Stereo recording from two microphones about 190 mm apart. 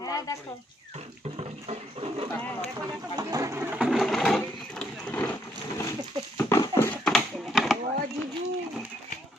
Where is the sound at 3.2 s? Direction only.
20° right (ahead or behind).